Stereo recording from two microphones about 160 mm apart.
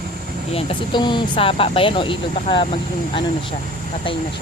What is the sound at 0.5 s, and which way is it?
Speech, 30° left (ahead or behind).